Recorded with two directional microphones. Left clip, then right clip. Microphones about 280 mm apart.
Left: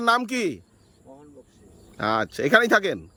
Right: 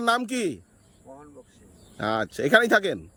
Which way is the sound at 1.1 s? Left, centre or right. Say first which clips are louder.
Right 2 dB; centre.